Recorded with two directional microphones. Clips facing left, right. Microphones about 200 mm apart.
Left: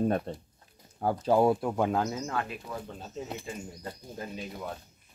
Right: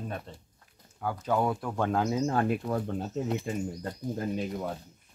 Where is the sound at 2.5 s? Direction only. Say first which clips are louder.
Right 10 dB; 55° right (ahead or behind).